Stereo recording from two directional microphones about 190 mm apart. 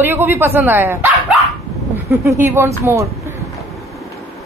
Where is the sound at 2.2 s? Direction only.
15° right (ahead or behind).